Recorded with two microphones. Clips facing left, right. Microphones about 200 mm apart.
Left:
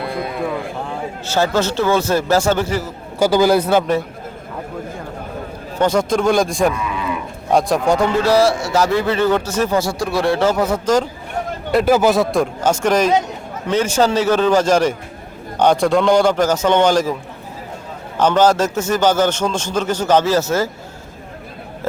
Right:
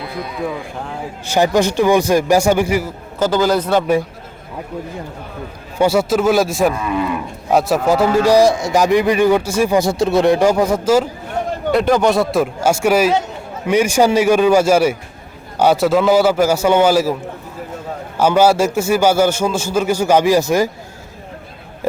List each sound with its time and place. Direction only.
0.2 s speech: 55° left (ahead or behind)
0.4 s speech: centre (ahead or behind)
1.3 s a man's voice: 15° right (ahead or behind)
3.2 s a man's voice: 10° left (ahead or behind)
5.8 s speech: 5° right (ahead or behind)
8.2 s a man's voice: 15° right (ahead or behind)
11.7 s a man's voice: 5° left (ahead or behind)
18.2 s a man's voice: 10° right (ahead or behind)